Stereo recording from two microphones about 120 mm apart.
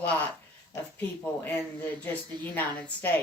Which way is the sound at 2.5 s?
15° left (ahead or behind).